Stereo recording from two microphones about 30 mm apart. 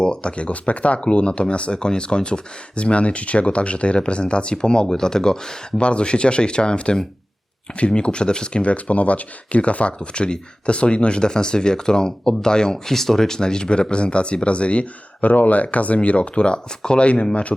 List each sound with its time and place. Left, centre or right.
0.0 s speech: left
5.7 s speech: left
8.6 s speech: left
15.2 s speech: left